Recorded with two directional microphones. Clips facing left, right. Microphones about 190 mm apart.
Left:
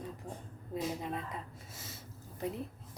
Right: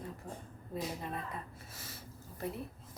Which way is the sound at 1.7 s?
20° left (ahead or behind).